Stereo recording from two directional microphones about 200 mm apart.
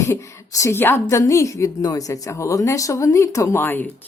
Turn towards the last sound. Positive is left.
turn(degrees=10)  # may be behind; listen again after turning